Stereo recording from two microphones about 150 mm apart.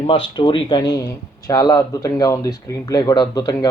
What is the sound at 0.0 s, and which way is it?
Speech, 35° left (ahead or behind).